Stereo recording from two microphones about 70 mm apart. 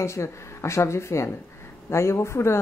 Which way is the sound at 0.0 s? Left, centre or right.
Left.